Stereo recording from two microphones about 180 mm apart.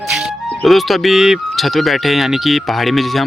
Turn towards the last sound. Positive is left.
turn(degrees=0)  # may be behind; listen again after turning